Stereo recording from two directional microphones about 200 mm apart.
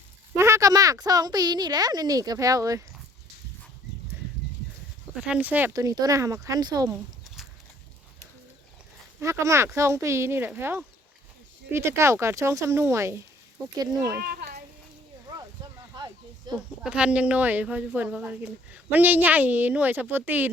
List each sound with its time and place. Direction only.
0.3 s speech: 15° right (ahead or behind)
5.2 s a woman's voice: 5° right (ahead or behind)
9.2 s a woman's voice: 15° right (ahead or behind)
14.2 s a sound: 50° right (ahead or behind)
16.5 s a woman's voice: 5° right (ahead or behind)